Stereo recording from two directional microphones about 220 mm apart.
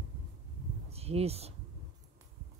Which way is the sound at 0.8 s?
30° right (ahead or behind).